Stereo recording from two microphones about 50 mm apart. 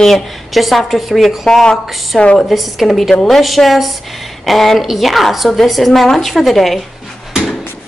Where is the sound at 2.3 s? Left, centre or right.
Centre.